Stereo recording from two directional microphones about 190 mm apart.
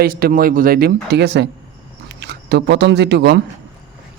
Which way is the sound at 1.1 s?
65° right (ahead or behind).